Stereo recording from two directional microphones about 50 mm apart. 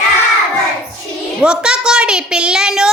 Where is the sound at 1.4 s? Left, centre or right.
Centre.